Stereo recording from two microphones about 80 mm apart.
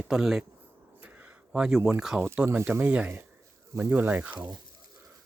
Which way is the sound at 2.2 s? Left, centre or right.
Right.